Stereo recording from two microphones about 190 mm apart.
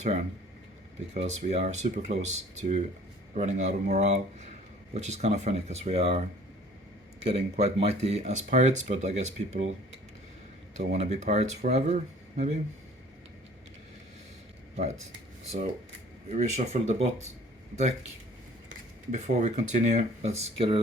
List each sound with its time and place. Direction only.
1.1 s speech: 35° right (ahead or behind)
7.3 s speech: 30° right (ahead or behind)
10.8 s speech: 35° right (ahead or behind)
16.3 s speech: 35° right (ahead or behind)
19.1 s speech: 35° right (ahead or behind)